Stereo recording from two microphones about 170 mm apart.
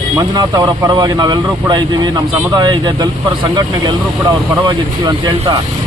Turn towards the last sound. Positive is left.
turn(degrees=-25)  # may be behind; listen again after turning